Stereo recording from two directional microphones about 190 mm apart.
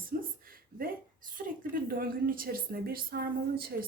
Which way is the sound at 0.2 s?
50° right (ahead or behind).